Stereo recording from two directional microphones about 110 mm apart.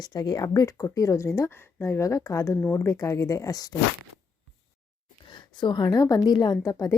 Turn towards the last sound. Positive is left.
turn(degrees=30)  # may be behind; listen again after turning